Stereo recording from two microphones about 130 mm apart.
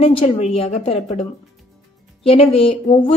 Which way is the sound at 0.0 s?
50° left (ahead or behind).